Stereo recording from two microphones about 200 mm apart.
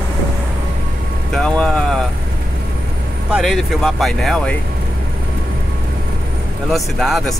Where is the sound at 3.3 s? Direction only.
Centre (ahead or behind).